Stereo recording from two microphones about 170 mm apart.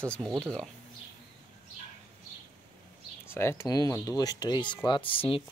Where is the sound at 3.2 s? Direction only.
15° left (ahead or behind).